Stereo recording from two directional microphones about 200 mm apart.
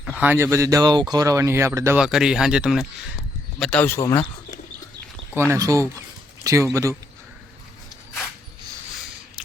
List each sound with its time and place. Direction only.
0.0 s speech: 5° right (ahead or behind)
2.0 s speech: 5° right (ahead or behind)
5.3 s speech: 15° right (ahead or behind)